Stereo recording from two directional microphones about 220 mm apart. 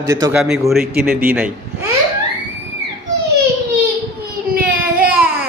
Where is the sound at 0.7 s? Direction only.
Centre (ahead or behind).